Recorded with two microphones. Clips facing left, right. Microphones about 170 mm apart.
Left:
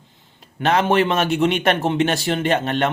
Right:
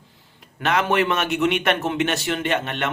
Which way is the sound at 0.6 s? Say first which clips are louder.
Left 3 dB; 30° left (ahead or behind).